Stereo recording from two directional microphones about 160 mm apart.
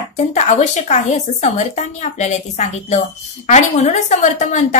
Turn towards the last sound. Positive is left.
turn(degrees=50)  # may be behind; listen again after turning